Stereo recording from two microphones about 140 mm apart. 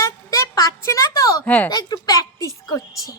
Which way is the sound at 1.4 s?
10° left (ahead or behind).